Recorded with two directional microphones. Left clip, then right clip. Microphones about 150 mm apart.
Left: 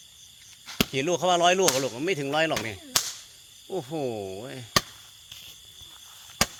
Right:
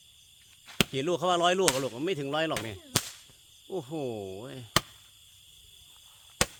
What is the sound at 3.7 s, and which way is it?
Speech, 25° right (ahead or behind).